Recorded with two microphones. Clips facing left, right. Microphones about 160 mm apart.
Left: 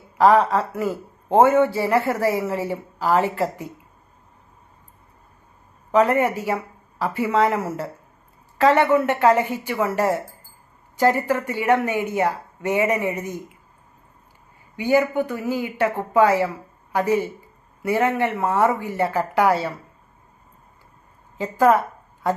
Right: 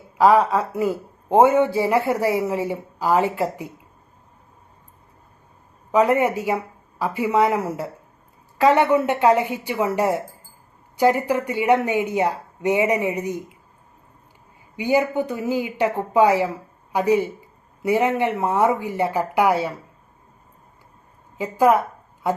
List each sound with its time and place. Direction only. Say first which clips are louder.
0.2 s speech: even; 10° right (ahead or behind)
5.9 s speech: even; 15° right (ahead or behind)
14.8 s speech: left 1 dB; 15° right (ahead or behind)
21.3 s a woman's voice: even; 15° right (ahead or behind)